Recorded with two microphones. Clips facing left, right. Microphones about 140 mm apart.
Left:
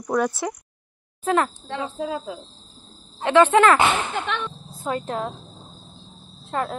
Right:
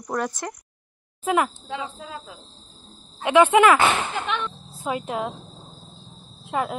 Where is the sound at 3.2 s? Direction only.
15° right (ahead or behind).